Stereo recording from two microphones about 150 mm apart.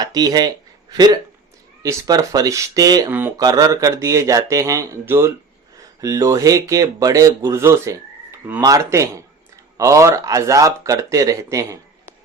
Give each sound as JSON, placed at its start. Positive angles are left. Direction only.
{"t": 0.0, "sound": "speech", "side_deg": -25}
{"t": 3.1, "sound": "a sound", "side_deg": -15}
{"t": 3.3, "sound": "speech", "side_deg": -25}